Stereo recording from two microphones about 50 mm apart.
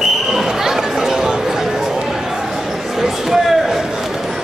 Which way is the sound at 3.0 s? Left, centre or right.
Centre.